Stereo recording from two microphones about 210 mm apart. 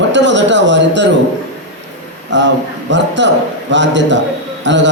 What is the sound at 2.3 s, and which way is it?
A man's voice, 60° right (ahead or behind).